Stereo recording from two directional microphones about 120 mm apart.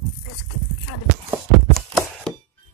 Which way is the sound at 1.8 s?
Centre (ahead or behind).